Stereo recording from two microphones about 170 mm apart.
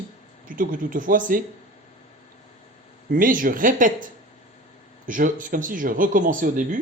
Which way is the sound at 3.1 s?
55° right (ahead or behind).